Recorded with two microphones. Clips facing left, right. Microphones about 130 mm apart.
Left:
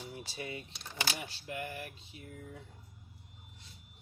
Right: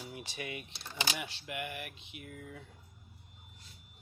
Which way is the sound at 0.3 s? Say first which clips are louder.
Even; 30° left (ahead or behind).